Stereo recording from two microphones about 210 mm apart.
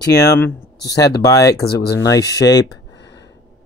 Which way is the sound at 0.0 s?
15° left (ahead or behind).